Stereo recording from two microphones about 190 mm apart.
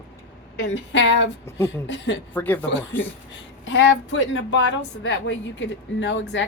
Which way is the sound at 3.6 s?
80° left.